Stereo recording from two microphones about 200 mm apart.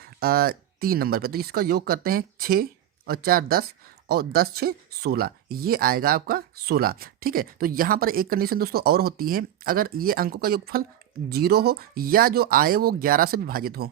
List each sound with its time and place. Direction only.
0.0 s speech: 50° right (ahead or behind)